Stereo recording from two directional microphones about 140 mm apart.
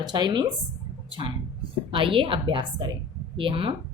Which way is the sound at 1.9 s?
40° right (ahead or behind).